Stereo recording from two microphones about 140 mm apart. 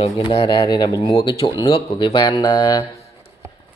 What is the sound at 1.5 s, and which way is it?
Speech, 30° left (ahead or behind).